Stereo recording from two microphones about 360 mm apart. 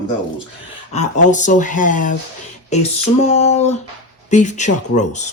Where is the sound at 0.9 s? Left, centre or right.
Centre.